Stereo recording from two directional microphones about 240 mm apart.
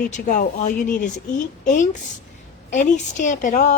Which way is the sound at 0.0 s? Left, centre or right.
Left.